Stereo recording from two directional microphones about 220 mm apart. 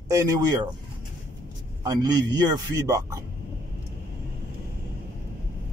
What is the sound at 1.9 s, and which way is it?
A man's voice, 15° right (ahead or behind).